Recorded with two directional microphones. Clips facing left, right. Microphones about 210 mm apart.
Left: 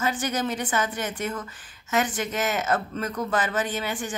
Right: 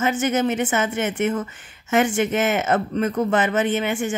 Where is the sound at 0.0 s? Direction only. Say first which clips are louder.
Right 6 dB; 25° right (ahead or behind).